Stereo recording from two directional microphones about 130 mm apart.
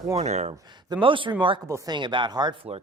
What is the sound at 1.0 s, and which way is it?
Speech, 40° right (ahead or behind).